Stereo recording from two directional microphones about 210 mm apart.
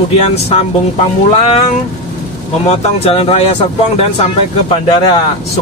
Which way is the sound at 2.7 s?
30° left (ahead or behind).